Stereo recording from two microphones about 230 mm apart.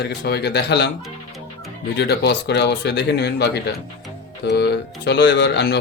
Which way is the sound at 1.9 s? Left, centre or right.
Left.